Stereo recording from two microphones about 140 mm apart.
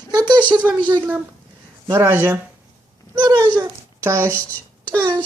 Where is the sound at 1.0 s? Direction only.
10° right (ahead or behind).